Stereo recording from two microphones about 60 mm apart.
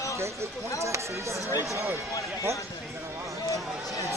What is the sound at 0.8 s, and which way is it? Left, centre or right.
Speech, right.